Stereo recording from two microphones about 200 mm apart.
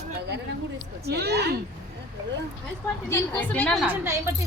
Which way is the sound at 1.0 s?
55° right (ahead or behind).